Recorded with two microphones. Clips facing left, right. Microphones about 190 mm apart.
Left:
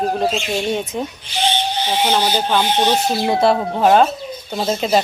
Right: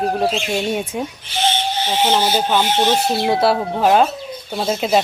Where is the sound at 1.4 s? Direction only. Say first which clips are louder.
Even; 15° left (ahead or behind).